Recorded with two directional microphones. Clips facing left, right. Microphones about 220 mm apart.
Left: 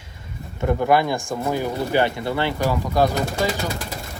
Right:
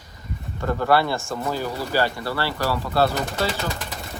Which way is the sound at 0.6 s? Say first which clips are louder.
Left 2 dB; 15° left (ahead or behind).